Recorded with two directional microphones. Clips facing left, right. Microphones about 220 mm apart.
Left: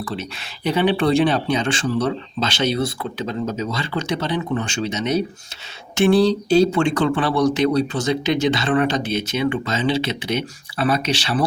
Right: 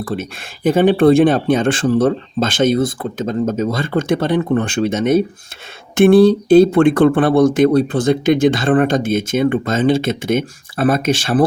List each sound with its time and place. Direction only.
0.0 s speech: 50° right (ahead or behind)